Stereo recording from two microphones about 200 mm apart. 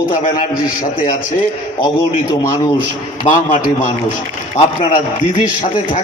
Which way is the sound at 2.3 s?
20° left (ahead or behind).